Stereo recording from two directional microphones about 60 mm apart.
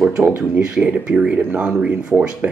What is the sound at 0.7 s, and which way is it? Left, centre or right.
Speech, centre.